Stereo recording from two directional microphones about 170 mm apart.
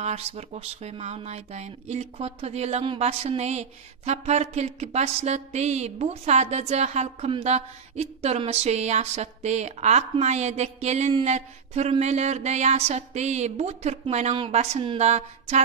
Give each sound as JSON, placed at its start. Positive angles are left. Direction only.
{"t": 0.0, "sound": "speech", "side_deg": -40}